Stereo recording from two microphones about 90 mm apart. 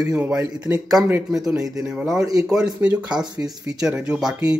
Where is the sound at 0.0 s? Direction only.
10° right (ahead or behind).